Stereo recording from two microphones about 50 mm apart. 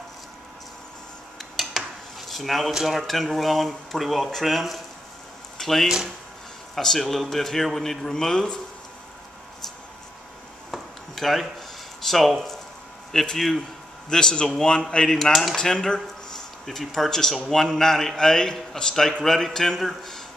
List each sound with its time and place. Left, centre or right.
1.4 s a sound: centre
2.7 s speech: centre
5.9 s speech: centre
6.7 s speech: centre
10.7 s a sound: centre
12.0 s speech: centre
14.0 s speech: centre
15.1 s speech: centre